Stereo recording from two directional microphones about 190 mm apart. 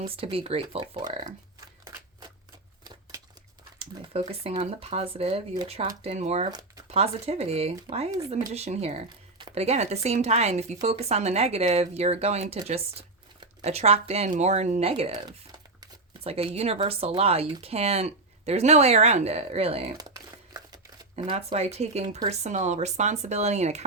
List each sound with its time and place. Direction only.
0.0 s speech: 30° right (ahead or behind)
3.8 s speech: 30° right (ahead or behind)
6.5 s a sound: 20° right (ahead or behind)
6.8 s speech: 30° right (ahead or behind)
16.2 s speech: 30° right (ahead or behind)
20.0 s crumpling: 20° right (ahead or behind)
21.2 s speech: 35° right (ahead or behind)